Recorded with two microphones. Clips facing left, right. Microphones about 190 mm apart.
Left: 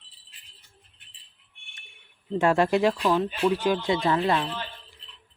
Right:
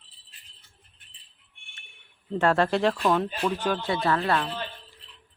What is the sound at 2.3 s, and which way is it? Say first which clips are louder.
Speech: left 1 dB; 10° left (ahead or behind).